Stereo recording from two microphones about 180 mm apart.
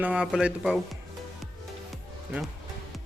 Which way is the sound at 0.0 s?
5° right (ahead or behind).